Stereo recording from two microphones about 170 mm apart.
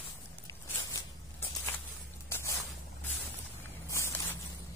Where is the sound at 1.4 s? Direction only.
15° left (ahead or behind).